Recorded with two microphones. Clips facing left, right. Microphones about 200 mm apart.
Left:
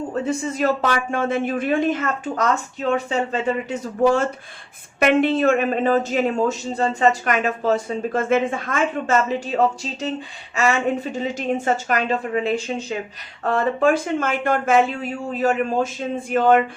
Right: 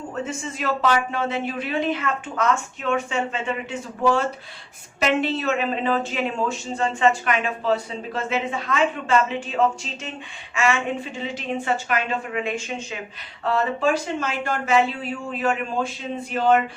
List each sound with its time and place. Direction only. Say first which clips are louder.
0.1 s speech: left 5 dB; 40° left (ahead or behind)
4.9 s a woman's voice: left 5 dB; 55° left (ahead or behind); by 12.7 s 35° left (ahead or behind)
13.4 s speech: left 3 dB; 50° left (ahead or behind)
15.3 s speech: left 5 dB; 40° left (ahead or behind)